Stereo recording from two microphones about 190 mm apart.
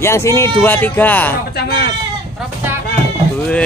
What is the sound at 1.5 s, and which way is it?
Speech, 60° left (ahead or behind).